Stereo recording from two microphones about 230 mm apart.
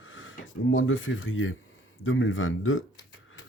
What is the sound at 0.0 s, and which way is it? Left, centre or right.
Speech, left.